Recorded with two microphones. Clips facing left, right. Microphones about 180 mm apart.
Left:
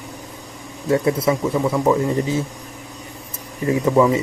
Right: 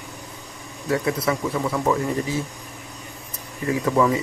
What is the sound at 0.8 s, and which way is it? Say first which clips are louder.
Speech: left 5 dB; 25° left (ahead or behind).